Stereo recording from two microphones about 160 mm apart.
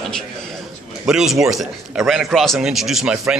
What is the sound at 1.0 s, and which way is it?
A man's voice, 5° right (ahead or behind).